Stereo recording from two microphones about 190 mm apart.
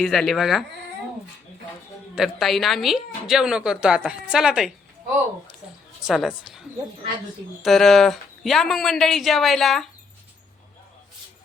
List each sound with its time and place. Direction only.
0.0 s a woman's voice: centre (ahead or behind)
2.1 s a woman's voice: centre (ahead or behind)
6.0 s a woman's voice: 5° right (ahead or behind)
7.6 s a woman's voice: centre (ahead or behind)